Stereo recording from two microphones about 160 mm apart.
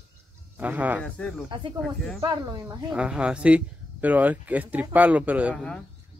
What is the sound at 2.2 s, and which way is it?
Speech, 25° right (ahead or behind).